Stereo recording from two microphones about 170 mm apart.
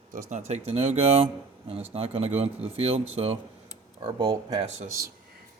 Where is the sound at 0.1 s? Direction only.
50° right (ahead or behind).